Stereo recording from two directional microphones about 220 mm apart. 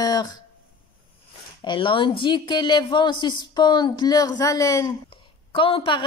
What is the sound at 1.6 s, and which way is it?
Speech, 20° left (ahead or behind).